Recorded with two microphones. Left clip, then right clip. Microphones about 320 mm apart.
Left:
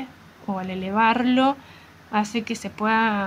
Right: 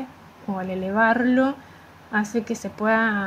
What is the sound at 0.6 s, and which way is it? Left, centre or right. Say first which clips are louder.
Speech: right 1 dB; centre.